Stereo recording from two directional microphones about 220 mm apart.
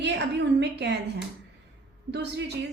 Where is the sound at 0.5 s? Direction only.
50° right (ahead or behind).